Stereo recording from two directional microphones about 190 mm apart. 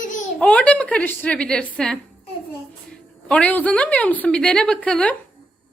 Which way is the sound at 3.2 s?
5° left (ahead or behind).